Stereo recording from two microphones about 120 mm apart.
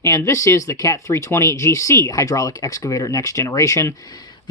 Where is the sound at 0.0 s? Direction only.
25° left (ahead or behind).